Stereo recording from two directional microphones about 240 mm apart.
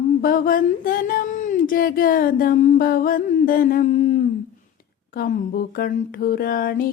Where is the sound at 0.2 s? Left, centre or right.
Left.